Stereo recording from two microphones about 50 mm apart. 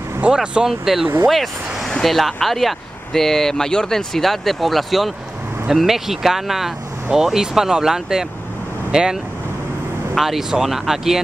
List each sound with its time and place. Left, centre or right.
0.2 s speech: centre
0.7 s speech: centre